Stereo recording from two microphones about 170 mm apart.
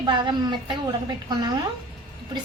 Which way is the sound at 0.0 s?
25° right (ahead or behind).